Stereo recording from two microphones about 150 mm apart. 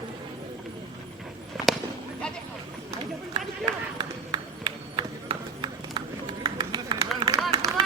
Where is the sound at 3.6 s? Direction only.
30° right (ahead or behind).